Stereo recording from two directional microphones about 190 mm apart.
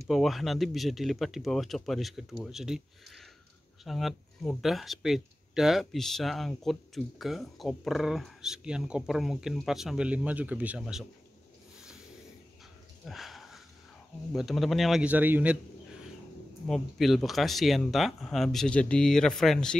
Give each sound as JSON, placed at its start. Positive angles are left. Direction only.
{"t": 0.1, "sound": "speech", "side_deg": 0}
{"t": 13.0, "sound": "a sound", "side_deg": 0}
{"t": 14.3, "sound": "speech", "side_deg": 0}
{"t": 16.6, "sound": "speech", "side_deg": 0}